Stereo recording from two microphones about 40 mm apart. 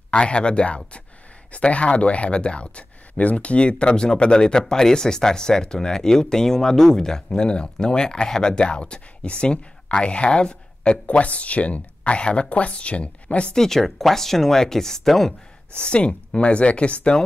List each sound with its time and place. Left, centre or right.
0.1 s speech: left
7.2 s speech: left
13.6 s speech: centre
15.7 s speech: left